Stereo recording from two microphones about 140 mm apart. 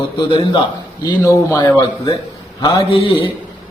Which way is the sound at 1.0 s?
20° left (ahead or behind).